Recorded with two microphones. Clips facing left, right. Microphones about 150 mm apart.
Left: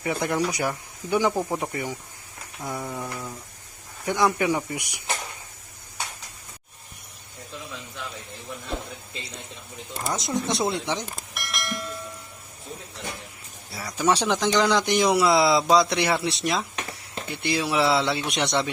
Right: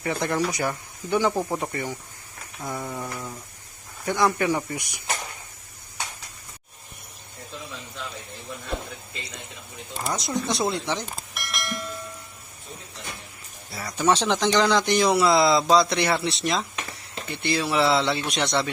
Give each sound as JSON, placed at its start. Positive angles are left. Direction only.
{"t": 0.0, "sound": "speech", "side_deg": 10}
{"t": 1.3, "sound": "a sound", "side_deg": 0}
{"t": 1.6, "sound": "speech", "side_deg": 10}
{"t": 2.6, "sound": "a sound", "side_deg": 5}
{"t": 4.0, "sound": "speech", "side_deg": 15}
{"t": 10.1, "sound": "speech", "side_deg": 20}
{"t": 11.0, "sound": "bell", "side_deg": 0}
{"t": 13.7, "sound": "speech", "side_deg": 5}